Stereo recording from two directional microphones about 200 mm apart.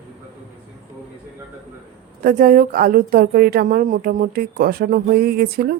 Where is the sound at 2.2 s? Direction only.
45° right (ahead or behind).